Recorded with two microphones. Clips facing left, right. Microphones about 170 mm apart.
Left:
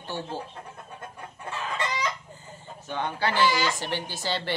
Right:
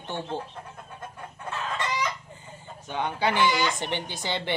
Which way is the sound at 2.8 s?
15° right (ahead or behind).